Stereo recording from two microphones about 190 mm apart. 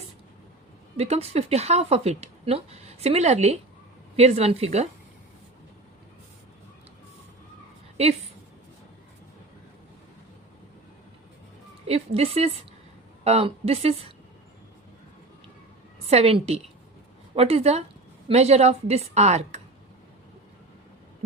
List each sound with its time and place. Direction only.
0.9 s a woman's voice: 35° right (ahead or behind)
11.9 s a woman's voice: 35° right (ahead or behind)
16.0 s a woman's voice: 30° right (ahead or behind)